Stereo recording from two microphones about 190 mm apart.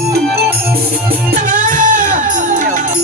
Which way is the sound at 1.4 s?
45° right (ahead or behind).